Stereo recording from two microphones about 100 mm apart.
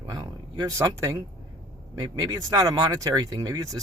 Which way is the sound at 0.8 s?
30° right (ahead or behind).